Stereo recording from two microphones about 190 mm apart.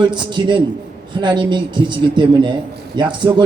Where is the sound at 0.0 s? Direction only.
25° right (ahead or behind).